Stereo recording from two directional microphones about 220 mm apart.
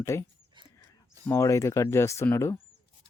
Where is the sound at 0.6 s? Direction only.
20° right (ahead or behind).